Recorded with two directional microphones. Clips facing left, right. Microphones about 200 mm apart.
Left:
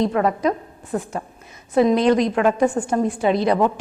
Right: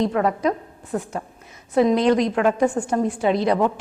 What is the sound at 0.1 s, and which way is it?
A woman's voice, 20° left (ahead or behind).